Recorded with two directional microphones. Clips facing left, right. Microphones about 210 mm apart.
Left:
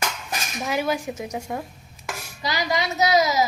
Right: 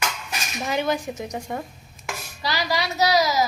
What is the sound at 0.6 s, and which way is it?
Speech, 5° left (ahead or behind).